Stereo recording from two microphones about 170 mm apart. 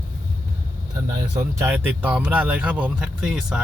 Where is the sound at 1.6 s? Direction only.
10° right (ahead or behind).